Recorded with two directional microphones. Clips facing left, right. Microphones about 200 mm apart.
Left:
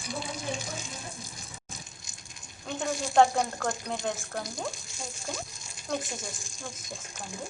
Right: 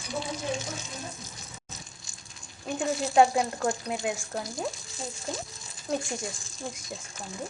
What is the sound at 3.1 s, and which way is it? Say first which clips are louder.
Speech: right 1 dB; 10° right (ahead or behind).